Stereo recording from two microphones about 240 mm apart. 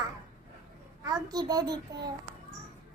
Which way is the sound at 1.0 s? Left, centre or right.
Centre.